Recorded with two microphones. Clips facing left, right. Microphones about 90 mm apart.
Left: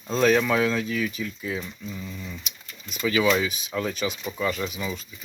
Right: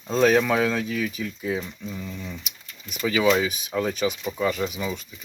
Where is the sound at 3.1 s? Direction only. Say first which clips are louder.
Right 1 dB; 10° right (ahead or behind).